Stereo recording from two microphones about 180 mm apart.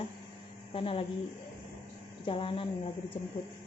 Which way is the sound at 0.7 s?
30° left (ahead or behind).